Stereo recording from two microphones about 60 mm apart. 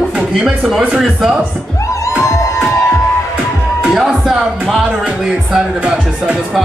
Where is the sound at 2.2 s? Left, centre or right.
Left.